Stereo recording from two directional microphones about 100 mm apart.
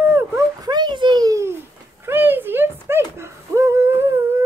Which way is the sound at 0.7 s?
50° right (ahead or behind).